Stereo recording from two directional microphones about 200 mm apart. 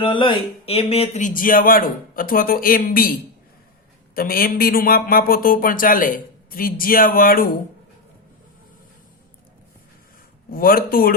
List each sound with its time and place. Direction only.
0.0 s speech: 25° left (ahead or behind); by 7.5 s 45° left (ahead or behind)
10.5 s speech: 45° left (ahead or behind)